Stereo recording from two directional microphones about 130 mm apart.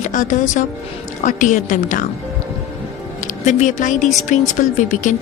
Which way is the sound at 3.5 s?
70° left (ahead or behind).